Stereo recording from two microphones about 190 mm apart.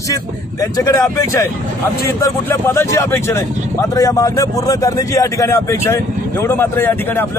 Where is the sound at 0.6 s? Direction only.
20° left (ahead or behind).